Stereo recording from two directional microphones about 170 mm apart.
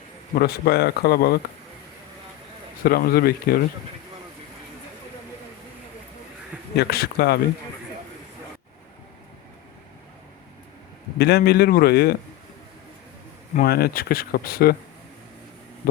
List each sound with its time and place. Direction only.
0.3 s speech: 65° left (ahead or behind)
2.8 s speech: 60° left (ahead or behind)
6.7 s speech: 65° left (ahead or behind)
11.2 s speech: 70° left (ahead or behind)
13.6 s speech: 65° left (ahead or behind)